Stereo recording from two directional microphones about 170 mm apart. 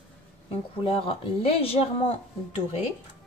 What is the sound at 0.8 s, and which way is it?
Speech, 35° left (ahead or behind).